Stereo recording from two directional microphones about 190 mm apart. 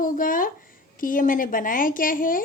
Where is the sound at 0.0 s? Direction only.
45° left (ahead or behind).